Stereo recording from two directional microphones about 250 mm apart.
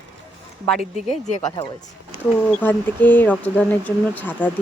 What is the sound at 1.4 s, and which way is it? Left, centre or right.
Speech, centre.